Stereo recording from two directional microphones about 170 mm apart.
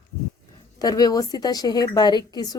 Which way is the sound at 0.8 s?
20° left (ahead or behind).